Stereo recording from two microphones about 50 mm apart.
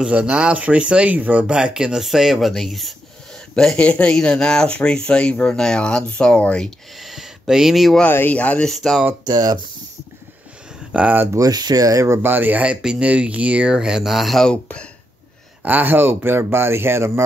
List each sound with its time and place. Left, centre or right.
0.0 s speech: centre
1.5 s speech: centre
3.7 s speech: left
7.0 s a sound: centre
8.3 s speech: left
8.6 s speech: centre
10.9 s speech: right
11.4 s speech: right
12.2 s speech: right
12.8 s speech: right
13.7 s speech: centre
14.4 s speech: left
15.6 s speech: right